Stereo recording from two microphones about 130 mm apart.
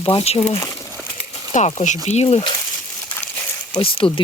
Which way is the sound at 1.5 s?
70° left (ahead or behind).